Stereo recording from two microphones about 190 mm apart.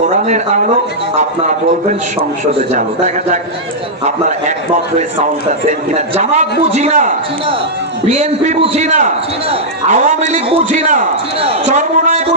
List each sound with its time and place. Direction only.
0.1 s a man's voice: 40° right (ahead or behind)